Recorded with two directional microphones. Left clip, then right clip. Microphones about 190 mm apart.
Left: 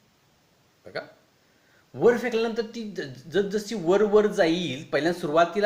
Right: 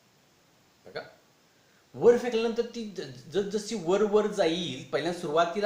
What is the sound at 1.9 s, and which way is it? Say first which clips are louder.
A man's voice: left 1 dB; 45° left (ahead or behind).